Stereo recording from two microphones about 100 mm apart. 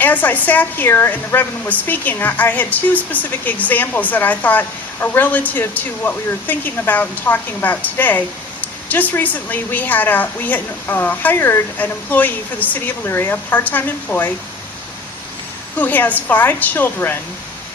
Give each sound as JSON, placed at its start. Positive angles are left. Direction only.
{"t": 0.0, "sound": "a woman's voice", "side_deg": 15}
{"t": 15.8, "sound": "a woman's voice", "side_deg": 15}